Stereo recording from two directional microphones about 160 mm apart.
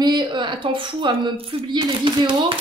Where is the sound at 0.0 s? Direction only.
25° right (ahead or behind).